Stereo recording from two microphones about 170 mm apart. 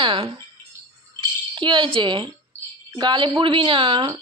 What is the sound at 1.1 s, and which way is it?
Rattle, 30° right (ahead or behind).